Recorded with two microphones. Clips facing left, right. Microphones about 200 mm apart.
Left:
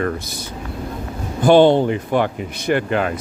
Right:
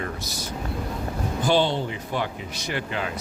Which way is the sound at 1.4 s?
55° left (ahead or behind).